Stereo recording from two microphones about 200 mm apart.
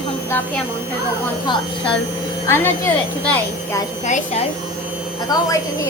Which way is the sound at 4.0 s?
35° left (ahead or behind).